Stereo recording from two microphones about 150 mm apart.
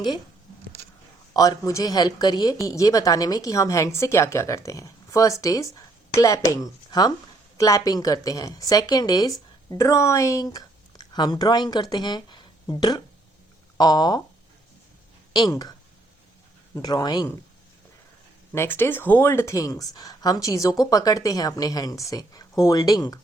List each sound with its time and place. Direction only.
1.3 s speech: 25° left (ahead or behind)
15.3 s speech: 25° left (ahead or behind)
16.7 s speech: 25° left (ahead or behind)
18.5 s speech: 15° left (ahead or behind)